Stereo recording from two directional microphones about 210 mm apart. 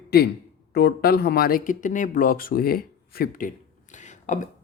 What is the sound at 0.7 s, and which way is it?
A man's voice, 50° left (ahead or behind).